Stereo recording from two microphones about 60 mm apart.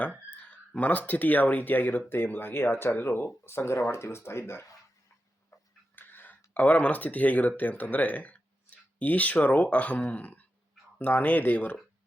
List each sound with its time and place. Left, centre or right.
0.3 s a sound: left
0.8 s speech: left
6.0 s speech: left